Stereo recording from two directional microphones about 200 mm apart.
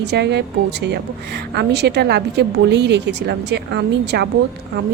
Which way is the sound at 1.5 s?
55° right (ahead or behind).